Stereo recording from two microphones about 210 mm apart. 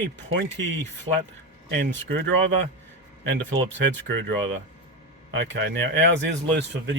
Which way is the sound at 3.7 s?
60° right (ahead or behind).